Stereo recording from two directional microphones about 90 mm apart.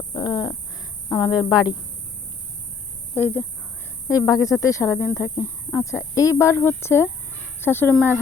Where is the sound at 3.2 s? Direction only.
20° left (ahead or behind).